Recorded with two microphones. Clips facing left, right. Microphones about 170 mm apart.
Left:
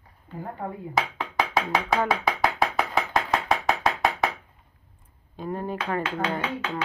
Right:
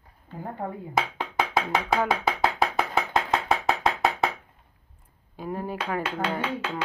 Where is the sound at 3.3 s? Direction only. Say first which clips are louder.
Even; centre (ahead or behind).